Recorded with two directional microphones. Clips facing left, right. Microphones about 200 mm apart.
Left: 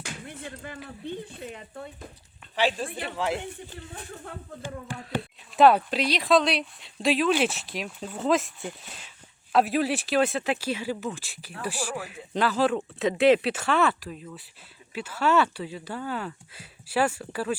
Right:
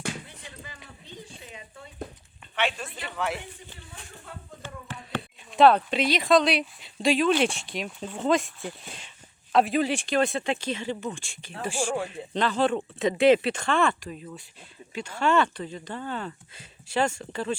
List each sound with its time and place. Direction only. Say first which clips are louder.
0.3 s a sound: left 7 dB; 55° left (ahead or behind)
0.9 s a woman's voice: left 9 dB; 55° left (ahead or behind)
2.6 s speech: left 3 dB; 30° left (ahead or behind)
4.6 s speech: left 4 dB; 15° left (ahead or behind)
11.8 s speech: right 7 dB; 25° right (ahead or behind)
12.0 s speech: left 1 dB; 5° left (ahead or behind)